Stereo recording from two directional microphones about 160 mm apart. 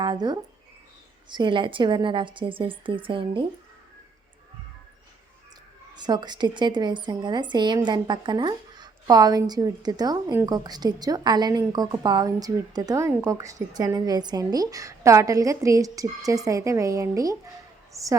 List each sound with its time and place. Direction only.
0.0 s a woman's voice: 25° right (ahead or behind)
5.9 s a woman's voice: 25° right (ahead or behind)